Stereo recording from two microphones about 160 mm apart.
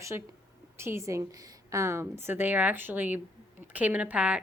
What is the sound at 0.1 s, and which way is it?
A woman's voice, 15° right (ahead or behind).